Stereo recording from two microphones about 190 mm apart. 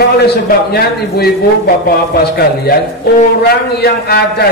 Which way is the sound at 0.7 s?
55° left (ahead or behind).